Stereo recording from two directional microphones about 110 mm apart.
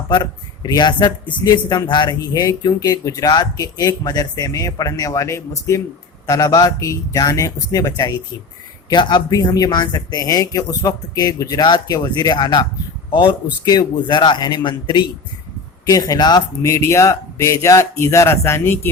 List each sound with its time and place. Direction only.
0.1 s a man's voice: 40° left (ahead or behind)
15.9 s a man's voice: 35° left (ahead or behind)
16.6 s speech: 25° left (ahead or behind)